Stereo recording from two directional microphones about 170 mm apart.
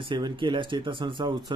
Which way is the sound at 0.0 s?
30° right (ahead or behind).